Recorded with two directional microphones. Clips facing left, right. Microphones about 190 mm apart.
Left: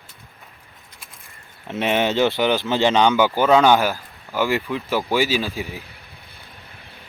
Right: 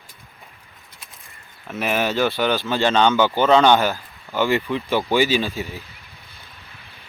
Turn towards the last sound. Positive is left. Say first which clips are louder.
# even
turn(degrees=15)  # may be behind; listen again after turning